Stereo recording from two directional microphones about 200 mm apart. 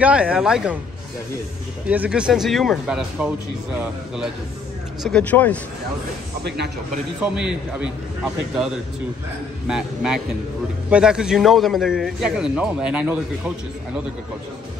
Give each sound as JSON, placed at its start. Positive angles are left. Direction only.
{"t": 0.0, "sound": "a man's voice", "side_deg": -5}
{"t": 1.9, "sound": "a man's voice", "side_deg": -5}
{"t": 5.0, "sound": "speech", "side_deg": 5}
{"t": 6.4, "sound": "speech", "side_deg": -55}
{"t": 7.2, "sound": "a man's voice", "side_deg": -5}